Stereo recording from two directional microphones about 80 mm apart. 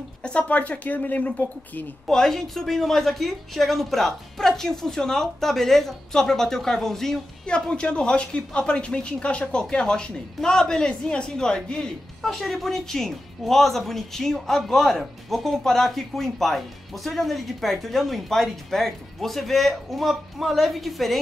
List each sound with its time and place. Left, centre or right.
0.2 s speech: centre
2.0 s a woman's voice: centre